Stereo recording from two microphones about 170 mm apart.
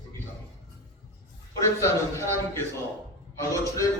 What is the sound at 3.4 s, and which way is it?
Speech, 20° left (ahead or behind).